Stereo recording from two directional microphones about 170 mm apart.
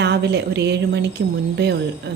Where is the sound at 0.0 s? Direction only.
85° right.